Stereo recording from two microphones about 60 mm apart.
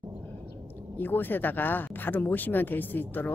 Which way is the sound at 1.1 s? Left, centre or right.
Left.